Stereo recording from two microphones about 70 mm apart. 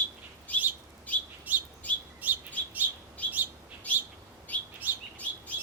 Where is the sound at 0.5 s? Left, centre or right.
Left.